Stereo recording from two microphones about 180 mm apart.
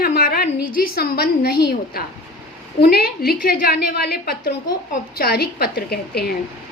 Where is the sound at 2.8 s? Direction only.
60° left (ahead or behind).